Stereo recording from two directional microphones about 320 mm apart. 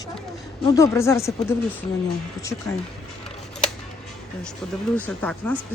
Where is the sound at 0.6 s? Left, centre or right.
Centre.